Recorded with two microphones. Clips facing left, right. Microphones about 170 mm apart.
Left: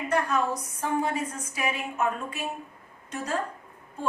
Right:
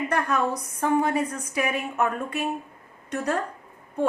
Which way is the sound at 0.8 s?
60° right (ahead or behind).